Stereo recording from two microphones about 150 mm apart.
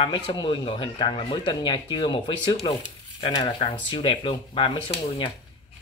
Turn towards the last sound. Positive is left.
turn(degrees=35)  # may be behind; listen again after turning